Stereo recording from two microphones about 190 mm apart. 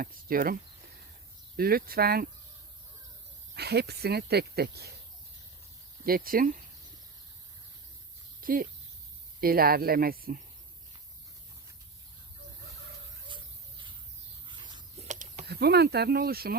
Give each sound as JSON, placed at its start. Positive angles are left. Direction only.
{"t": 0.0, "sound": "speech", "side_deg": -50}
{"t": 1.5, "sound": "speech", "side_deg": -50}
{"t": 3.5, "sound": "speech", "side_deg": -60}
{"t": 6.1, "sound": "speech", "side_deg": -50}
{"t": 8.4, "sound": "a sound", "side_deg": -50}
{"t": 9.4, "sound": "speech", "side_deg": -50}
{"t": 14.4, "sound": "a sound", "side_deg": -25}
{"t": 15.0, "sound": "a sound", "side_deg": -40}
{"t": 15.4, "sound": "speech", "side_deg": -60}